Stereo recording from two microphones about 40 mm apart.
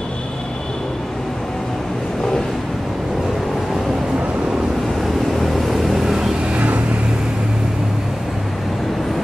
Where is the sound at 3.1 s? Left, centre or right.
Centre.